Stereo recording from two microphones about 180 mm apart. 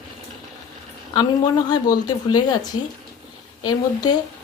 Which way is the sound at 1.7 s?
20° left (ahead or behind).